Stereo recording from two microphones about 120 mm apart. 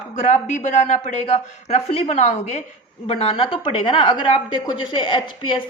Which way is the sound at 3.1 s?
50° left (ahead or behind).